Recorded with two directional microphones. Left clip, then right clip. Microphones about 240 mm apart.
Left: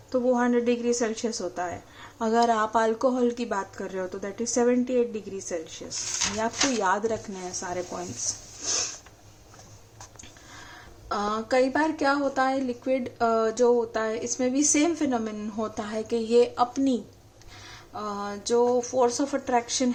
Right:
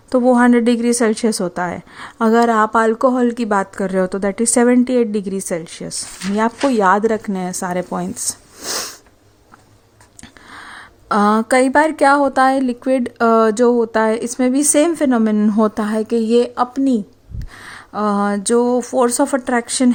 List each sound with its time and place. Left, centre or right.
0.1 s speech: right
10.5 s speech: right